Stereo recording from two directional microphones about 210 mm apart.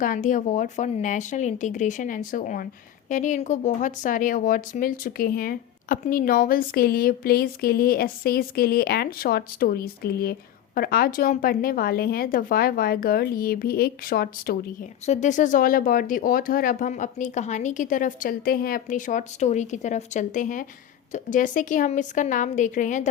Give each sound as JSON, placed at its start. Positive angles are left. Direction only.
{"t": 0.0, "sound": "speech", "side_deg": 40}
{"t": 15.0, "sound": "speech", "side_deg": 35}